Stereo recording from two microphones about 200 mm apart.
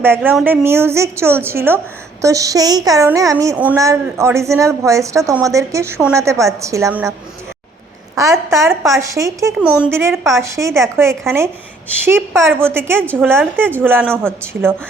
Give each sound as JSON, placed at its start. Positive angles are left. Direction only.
{"t": 0.0, "sound": "a woman's voice", "side_deg": -10}
{"t": 8.1, "sound": "a woman's voice", "side_deg": -15}
{"t": 9.6, "sound": "a woman's voice", "side_deg": -5}